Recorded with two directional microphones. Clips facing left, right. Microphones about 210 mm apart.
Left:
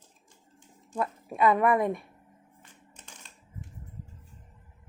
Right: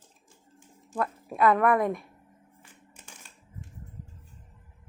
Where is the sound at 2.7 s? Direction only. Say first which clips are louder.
Even; 10° right (ahead or behind).